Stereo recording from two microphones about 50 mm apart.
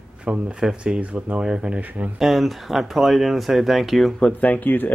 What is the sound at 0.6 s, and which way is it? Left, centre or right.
Speech, centre.